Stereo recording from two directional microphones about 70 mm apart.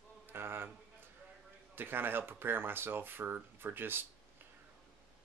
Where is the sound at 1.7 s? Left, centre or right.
Right.